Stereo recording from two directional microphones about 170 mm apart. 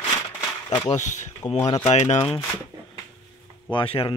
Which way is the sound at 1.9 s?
40° left (ahead or behind).